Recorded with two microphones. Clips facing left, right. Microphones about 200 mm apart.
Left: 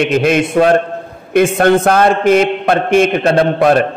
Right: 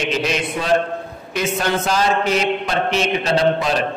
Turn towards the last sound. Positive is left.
turn(degrees=55)  # may be behind; listen again after turning